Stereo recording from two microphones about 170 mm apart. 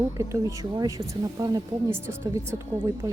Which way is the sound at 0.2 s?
15° right (ahead or behind).